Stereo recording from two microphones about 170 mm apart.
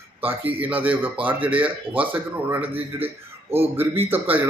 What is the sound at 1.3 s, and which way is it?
Speech, 30° right (ahead or behind).